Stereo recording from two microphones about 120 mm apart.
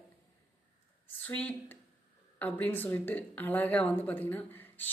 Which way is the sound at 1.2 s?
15° left (ahead or behind).